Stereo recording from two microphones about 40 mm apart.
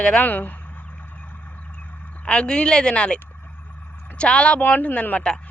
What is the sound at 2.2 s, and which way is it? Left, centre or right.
Speech, left.